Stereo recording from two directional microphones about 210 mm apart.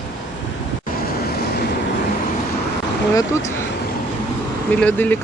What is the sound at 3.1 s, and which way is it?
Speech, 15° left (ahead or behind).